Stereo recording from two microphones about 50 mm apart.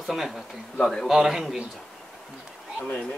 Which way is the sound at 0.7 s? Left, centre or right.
Centre.